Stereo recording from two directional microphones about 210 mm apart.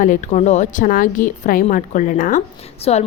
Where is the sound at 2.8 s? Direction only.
30° left (ahead or behind).